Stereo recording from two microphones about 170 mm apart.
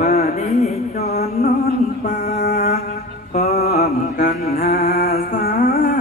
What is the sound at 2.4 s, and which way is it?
Music, 65° left (ahead or behind).